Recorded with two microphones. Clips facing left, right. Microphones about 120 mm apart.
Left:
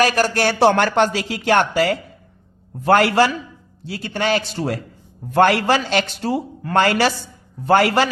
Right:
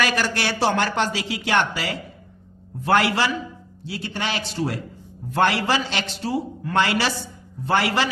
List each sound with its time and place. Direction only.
0.0 s speech: 45° left (ahead or behind)